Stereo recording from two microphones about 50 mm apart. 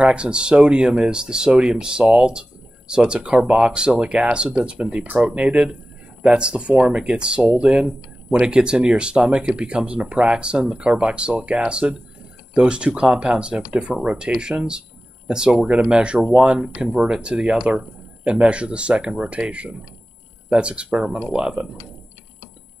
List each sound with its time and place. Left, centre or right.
0.0 s speech: centre
7.4 s speech: right
7.7 s speech: right